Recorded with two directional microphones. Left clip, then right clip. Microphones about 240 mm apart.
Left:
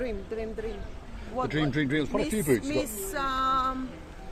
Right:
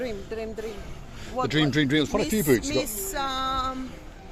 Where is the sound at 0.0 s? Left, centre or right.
Right.